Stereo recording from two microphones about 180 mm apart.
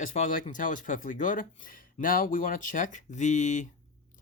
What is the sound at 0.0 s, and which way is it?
Speech, 50° left (ahead or behind).